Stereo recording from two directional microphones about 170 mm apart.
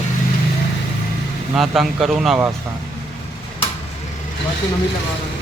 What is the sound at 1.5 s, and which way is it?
Speech, centre (ahead or behind).